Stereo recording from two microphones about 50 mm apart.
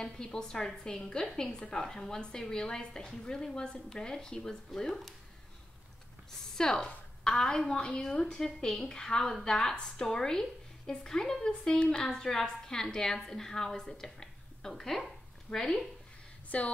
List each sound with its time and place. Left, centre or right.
0.0 s a woman's voice: centre
6.5 s a woman's voice: centre
16.4 s speech: left